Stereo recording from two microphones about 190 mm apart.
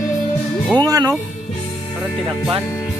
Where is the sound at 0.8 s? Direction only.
20° right (ahead or behind).